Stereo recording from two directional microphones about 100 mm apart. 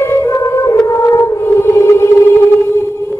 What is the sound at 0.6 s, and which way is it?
Music, 35° left (ahead or behind).